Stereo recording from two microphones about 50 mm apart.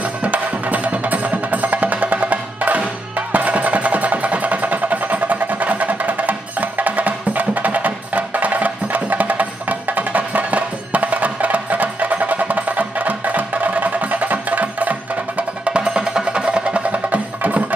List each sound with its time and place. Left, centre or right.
0.0 s music: right